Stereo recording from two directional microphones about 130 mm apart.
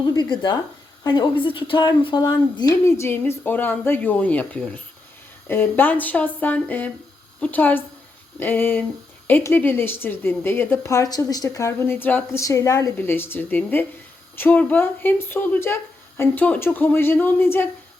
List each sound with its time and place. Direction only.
0.0 s a woman's voice: 35° left (ahead or behind); by 17.7 s 15° left (ahead or behind)